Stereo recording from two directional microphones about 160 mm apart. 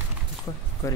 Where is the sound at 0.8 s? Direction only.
20° left (ahead or behind).